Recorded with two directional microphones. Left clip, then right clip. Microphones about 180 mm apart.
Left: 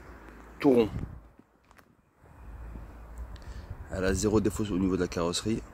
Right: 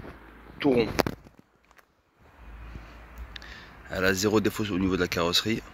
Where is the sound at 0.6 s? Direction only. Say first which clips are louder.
Left 1 dB; 35° left (ahead or behind).